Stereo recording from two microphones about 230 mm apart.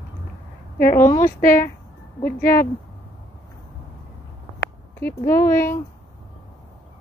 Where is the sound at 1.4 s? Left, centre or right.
Left.